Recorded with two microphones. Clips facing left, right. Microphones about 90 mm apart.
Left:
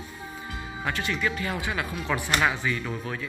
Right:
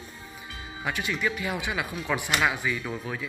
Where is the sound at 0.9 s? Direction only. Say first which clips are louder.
Even; 15° right (ahead or behind).